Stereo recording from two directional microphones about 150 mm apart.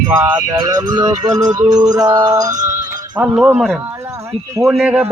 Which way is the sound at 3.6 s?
5° right (ahead or behind).